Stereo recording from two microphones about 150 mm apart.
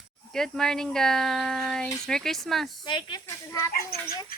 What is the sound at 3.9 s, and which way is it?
Speech, 90° left.